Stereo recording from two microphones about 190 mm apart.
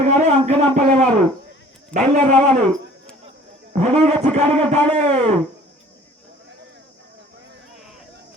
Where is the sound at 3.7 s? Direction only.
35° right (ahead or behind).